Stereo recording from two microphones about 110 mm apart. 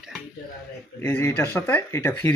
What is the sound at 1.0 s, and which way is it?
Speech, 20° left (ahead or behind).